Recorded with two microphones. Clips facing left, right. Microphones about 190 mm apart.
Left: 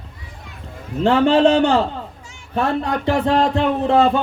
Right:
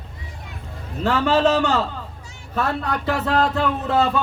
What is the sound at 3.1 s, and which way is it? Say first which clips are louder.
Speech: left 4 dB; 30° left (ahead or behind).